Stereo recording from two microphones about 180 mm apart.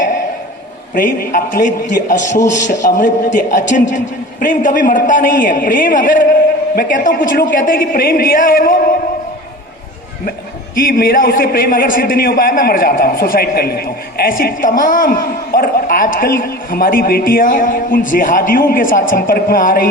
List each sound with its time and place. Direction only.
1.2 s a man's voice: 50° left (ahead or behind)
10.8 s a man's voice: 55° left (ahead or behind)